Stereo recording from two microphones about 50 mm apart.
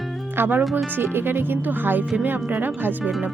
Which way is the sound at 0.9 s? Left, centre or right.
Right.